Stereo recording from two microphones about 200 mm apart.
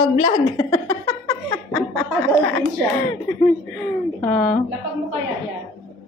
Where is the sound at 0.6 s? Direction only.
15° left (ahead or behind).